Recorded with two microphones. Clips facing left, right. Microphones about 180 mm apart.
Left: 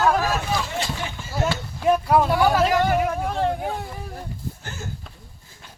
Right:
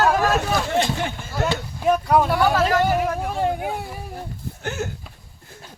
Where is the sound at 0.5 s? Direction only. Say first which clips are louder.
Right 5 dB; 55° right (ahead or behind).